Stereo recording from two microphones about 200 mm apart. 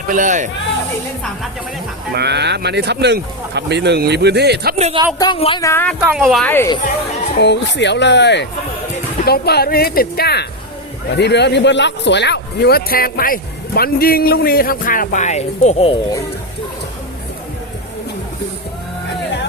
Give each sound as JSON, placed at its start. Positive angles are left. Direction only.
{"t": 0.1, "sound": "speech", "side_deg": -40}
{"t": 2.1, "sound": "speech", "side_deg": -55}
{"t": 4.8, "sound": "speech", "side_deg": -30}
{"t": 5.2, "sound": "speech", "side_deg": 25}
{"t": 5.6, "sound": "a woman's voice", "side_deg": 10}
{"t": 6.0, "sound": "speech", "side_deg": -5}
{"t": 6.5, "sound": "a woman's voice", "side_deg": 10}
{"t": 7.3, "sound": "a man's voice", "side_deg": 60}